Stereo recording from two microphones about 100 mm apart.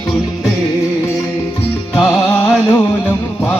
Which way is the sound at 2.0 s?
20° left (ahead or behind).